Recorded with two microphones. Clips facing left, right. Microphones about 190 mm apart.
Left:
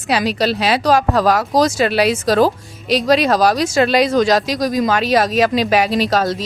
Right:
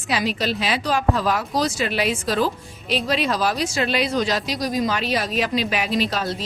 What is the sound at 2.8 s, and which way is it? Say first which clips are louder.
Speech: left 8 dB; 90° left.